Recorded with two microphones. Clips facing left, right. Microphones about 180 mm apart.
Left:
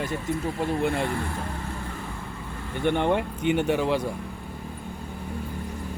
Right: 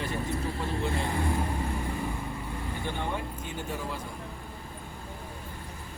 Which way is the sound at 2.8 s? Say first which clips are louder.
Left 13 dB; 70° left (ahead or behind).